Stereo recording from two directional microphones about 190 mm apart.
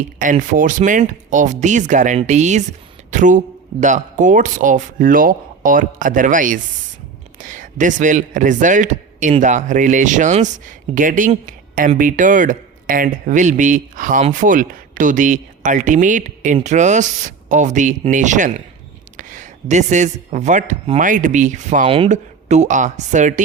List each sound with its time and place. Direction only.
0.2 s a man's voice: 45° right (ahead or behind)